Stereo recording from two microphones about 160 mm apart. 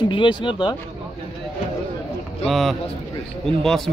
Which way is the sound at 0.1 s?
30° left (ahead or behind).